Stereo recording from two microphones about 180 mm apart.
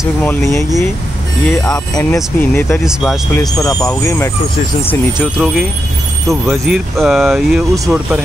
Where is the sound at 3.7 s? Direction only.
15° left (ahead or behind).